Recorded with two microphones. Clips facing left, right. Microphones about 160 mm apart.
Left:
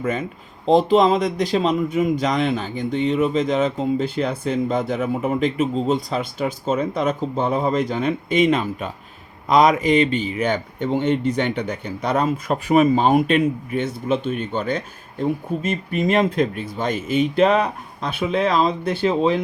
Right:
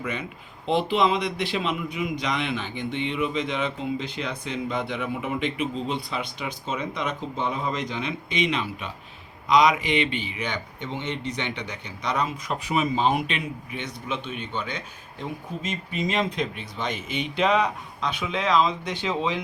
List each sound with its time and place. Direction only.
0.0 s speech: 45° left (ahead or behind)